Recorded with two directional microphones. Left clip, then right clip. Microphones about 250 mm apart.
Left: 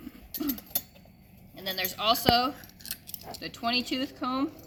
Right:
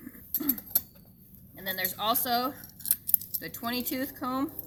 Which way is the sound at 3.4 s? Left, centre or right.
Centre.